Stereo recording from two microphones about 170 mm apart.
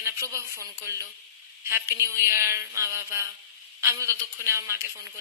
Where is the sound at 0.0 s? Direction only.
15° right (ahead or behind).